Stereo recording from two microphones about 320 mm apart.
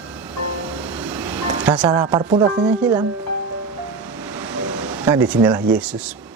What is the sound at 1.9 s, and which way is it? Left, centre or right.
Speech, centre.